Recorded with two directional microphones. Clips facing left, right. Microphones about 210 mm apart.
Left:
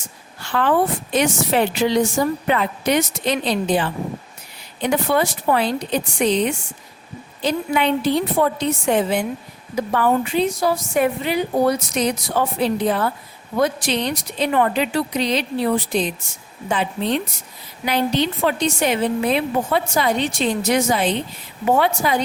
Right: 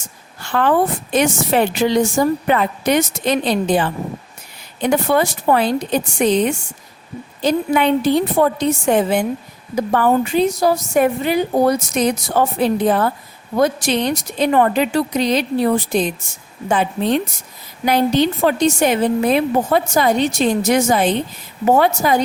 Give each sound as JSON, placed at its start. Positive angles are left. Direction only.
{"t": 0.4, "sound": "a woman's voice", "side_deg": -45}